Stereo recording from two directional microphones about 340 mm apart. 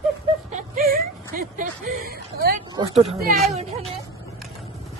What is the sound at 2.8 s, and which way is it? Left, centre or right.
Speech, centre.